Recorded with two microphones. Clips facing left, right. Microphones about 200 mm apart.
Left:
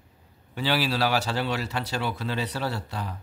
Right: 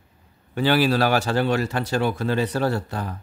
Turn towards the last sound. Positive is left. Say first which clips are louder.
# right 6 dB
turn(degrees=-50)  # may be behind; listen again after turning